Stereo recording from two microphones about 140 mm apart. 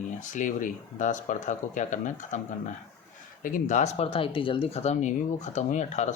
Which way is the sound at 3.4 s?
75° left (ahead or behind).